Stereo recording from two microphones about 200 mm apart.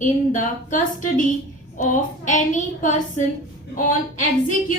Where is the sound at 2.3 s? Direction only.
40° left (ahead or behind).